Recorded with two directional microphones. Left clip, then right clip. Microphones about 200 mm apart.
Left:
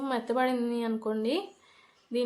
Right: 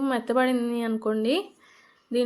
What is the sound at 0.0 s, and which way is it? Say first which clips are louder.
A woman's voice: right 4 dB; 20° right (ahead or behind).